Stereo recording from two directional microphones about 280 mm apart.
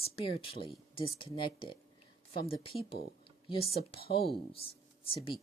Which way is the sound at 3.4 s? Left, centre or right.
Centre.